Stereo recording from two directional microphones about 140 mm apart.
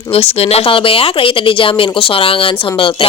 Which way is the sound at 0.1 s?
45° left (ahead or behind).